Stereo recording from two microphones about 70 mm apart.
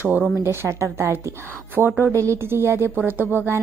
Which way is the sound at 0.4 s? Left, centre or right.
Right.